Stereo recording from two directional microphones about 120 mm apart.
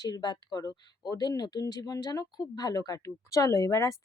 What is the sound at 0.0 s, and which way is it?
Speech, 35° left (ahead or behind).